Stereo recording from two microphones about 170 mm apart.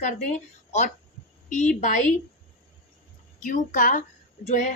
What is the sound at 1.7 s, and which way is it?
Speech, 45° left (ahead or behind).